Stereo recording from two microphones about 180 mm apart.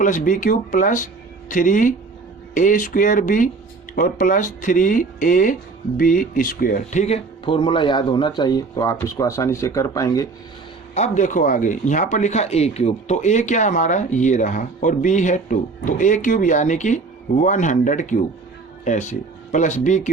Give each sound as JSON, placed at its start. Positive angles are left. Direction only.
{"t": 0.0, "sound": "speech", "side_deg": 45}
{"t": 10.9, "sound": "speech", "side_deg": 40}